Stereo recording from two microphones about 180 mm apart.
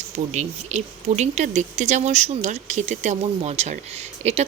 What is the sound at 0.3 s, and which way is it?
Speech, 40° right (ahead or behind).